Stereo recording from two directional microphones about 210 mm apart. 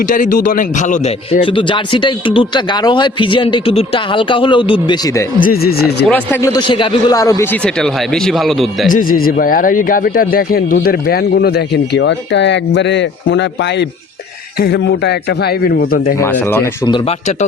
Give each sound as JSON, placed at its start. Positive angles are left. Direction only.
{"t": 0.0, "sound": "a man's voice", "side_deg": 40}
{"t": 5.4, "sound": "speech", "side_deg": 45}
{"t": 6.1, "sound": "a man's voice", "side_deg": 10}
{"t": 8.9, "sound": "speech", "side_deg": 40}
{"t": 16.2, "sound": "a man's voice", "side_deg": 10}
{"t": 16.9, "sound": "a man's voice", "side_deg": 30}